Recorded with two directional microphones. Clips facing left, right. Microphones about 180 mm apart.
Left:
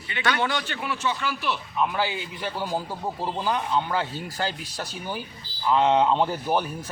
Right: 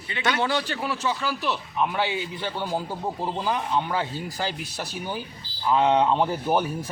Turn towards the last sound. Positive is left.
turn(degrees=-5)  # may be behind; listen again after turning